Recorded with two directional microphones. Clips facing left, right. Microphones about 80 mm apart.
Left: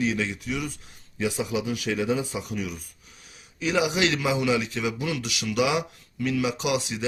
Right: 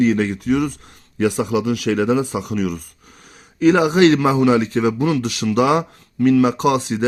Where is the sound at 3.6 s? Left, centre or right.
Right.